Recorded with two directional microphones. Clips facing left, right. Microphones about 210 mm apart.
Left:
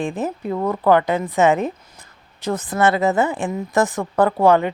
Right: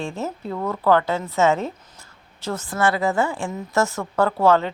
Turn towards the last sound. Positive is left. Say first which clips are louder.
# left 3 dB
turn(degrees=15)  # may be behind; listen again after turning